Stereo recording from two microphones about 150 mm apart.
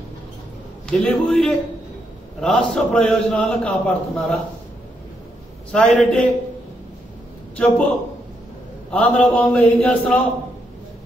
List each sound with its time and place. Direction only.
0.8 s a man's voice: 5° left (ahead or behind)
5.7 s a man's voice: 5° left (ahead or behind)
7.5 s a man's voice: 10° left (ahead or behind)
8.9 s a man's voice: 10° left (ahead or behind)